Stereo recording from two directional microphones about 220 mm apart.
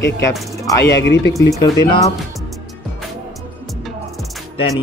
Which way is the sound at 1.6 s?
20° left (ahead or behind).